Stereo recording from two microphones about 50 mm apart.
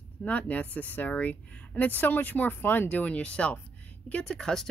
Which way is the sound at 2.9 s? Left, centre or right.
Left.